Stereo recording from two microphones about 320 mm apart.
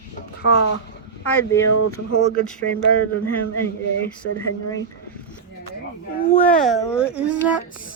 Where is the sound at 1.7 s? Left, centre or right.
Left.